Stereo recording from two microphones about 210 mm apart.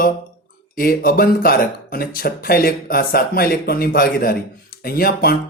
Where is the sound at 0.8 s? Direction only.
45° left (ahead or behind).